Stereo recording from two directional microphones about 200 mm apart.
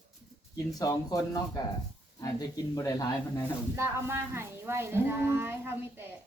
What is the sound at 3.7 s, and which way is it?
Speech, 15° right (ahead or behind).